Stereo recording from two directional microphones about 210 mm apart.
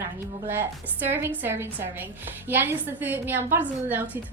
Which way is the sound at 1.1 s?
10° right (ahead or behind).